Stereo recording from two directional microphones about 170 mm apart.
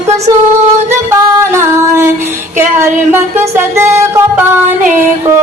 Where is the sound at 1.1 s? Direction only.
15° right (ahead or behind).